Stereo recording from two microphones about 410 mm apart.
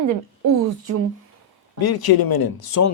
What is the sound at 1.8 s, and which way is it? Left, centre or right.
Speech, left.